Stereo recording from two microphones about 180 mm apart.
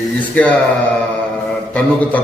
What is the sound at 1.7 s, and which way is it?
Speech, 10° left (ahead or behind).